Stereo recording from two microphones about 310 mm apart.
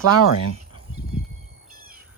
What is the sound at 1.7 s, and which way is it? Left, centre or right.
Bird, right.